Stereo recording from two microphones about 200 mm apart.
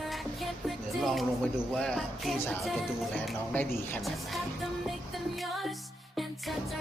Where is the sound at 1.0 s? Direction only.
Centre (ahead or behind).